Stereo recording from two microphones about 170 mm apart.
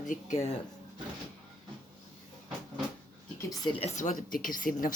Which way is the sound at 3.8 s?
45° left (ahead or behind).